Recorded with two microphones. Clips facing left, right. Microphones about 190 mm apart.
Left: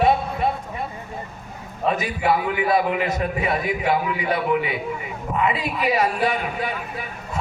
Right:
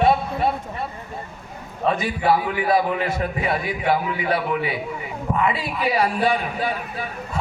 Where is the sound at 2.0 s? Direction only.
30° right (ahead or behind).